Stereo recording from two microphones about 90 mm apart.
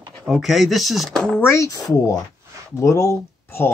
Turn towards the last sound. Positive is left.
turn(degrees=30)  # may be behind; listen again after turning